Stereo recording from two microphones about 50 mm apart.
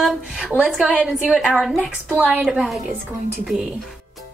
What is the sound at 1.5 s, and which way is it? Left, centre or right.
Speech, centre.